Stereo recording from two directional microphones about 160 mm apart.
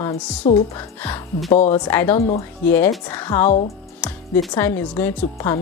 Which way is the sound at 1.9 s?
10° left (ahead or behind).